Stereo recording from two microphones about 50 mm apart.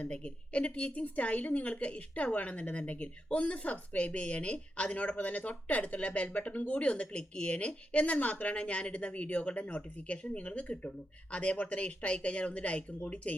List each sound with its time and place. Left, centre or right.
0.0 s a woman's voice: left